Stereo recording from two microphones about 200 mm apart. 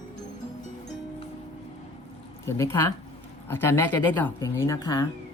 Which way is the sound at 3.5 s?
10° left (ahead or behind).